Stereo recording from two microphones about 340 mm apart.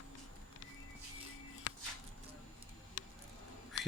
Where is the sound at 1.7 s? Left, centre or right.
Left.